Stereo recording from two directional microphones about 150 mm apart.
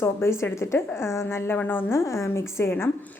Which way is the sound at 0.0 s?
15° left (ahead or behind).